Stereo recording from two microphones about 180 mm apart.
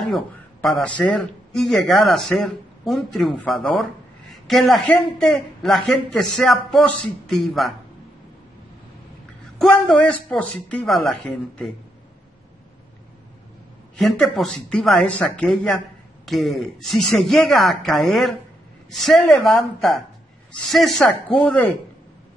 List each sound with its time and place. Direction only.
0.7 s speech: 5° left (ahead or behind)
9.6 s speech: centre (ahead or behind)
13.9 s speech: centre (ahead or behind)
20.6 s speech: centre (ahead or behind)